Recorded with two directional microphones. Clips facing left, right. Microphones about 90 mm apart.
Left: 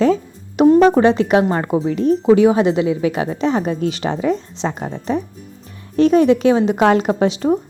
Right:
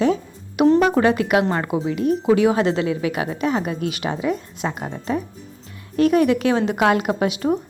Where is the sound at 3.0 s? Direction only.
30° left (ahead or behind).